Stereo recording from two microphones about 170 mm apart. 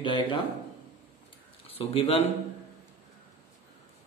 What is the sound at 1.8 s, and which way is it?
Speech, 35° left (ahead or behind).